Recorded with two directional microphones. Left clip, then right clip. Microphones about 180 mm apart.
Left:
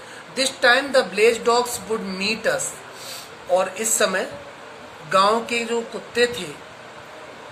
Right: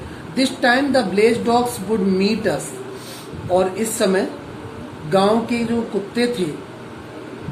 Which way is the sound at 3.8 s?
45° left (ahead or behind).